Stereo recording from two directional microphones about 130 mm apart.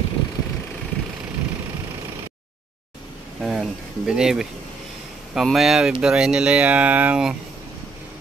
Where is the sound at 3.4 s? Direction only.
5° right (ahead or behind).